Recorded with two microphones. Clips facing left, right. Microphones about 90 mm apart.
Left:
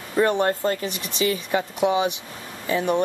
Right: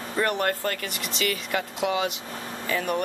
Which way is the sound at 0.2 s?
25° left (ahead or behind).